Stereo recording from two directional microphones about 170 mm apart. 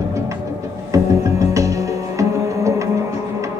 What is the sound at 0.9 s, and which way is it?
Music, 20° right (ahead or behind).